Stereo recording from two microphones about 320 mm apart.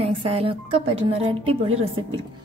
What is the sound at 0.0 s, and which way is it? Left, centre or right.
A woman's voice, centre.